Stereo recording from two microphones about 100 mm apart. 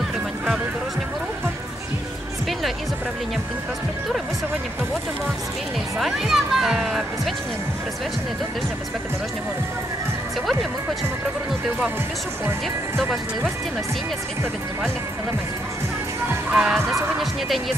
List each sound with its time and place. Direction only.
5.9 s speech: 5° right (ahead or behind)
12.4 s speech: 25° right (ahead or behind)
16.5 s speech: 5° right (ahead or behind)